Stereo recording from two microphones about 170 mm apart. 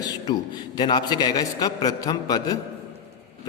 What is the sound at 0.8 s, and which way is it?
A man's voice, 25° left (ahead or behind).